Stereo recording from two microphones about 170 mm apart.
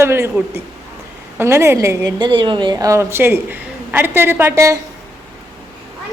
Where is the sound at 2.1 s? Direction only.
25° right (ahead or behind).